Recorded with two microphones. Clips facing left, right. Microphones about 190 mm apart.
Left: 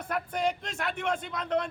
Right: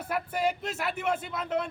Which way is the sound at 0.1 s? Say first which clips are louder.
Right 1 dB; 5° right (ahead or behind).